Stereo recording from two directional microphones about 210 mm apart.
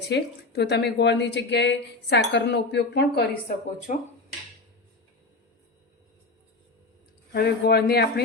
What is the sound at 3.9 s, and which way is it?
Speech, 35° left (ahead or behind).